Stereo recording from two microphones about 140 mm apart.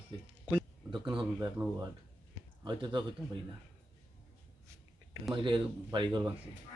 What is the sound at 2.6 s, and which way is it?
Speech, 35° right (ahead or behind).